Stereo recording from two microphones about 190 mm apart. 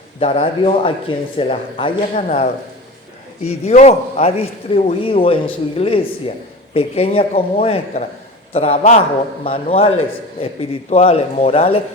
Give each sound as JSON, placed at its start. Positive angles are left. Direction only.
{"t": 0.2, "sound": "a man's voice", "side_deg": 30}